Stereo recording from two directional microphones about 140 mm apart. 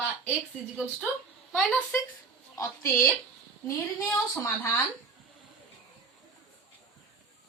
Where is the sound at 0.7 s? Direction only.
10° right (ahead or behind).